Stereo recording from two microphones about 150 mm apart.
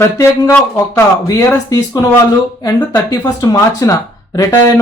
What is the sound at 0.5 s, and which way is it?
Speech, 20° left (ahead or behind).